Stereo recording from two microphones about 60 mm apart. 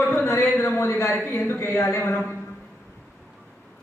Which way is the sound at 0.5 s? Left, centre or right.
Left.